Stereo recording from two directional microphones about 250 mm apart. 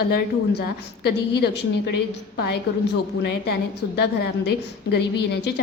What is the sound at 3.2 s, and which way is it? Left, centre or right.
Speech, left.